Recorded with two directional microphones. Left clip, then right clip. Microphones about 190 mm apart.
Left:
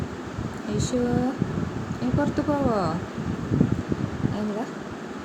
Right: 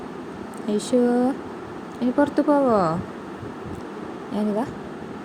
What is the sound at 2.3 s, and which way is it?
Speech, 25° right (ahead or behind).